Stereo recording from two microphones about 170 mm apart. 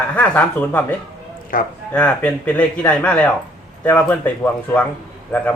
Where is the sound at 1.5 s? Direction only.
55° left (ahead or behind).